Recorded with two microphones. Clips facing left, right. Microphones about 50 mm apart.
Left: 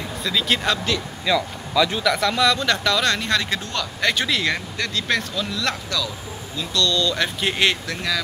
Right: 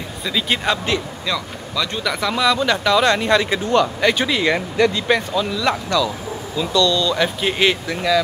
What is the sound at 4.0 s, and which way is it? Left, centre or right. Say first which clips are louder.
Speech: right 4 dB; centre.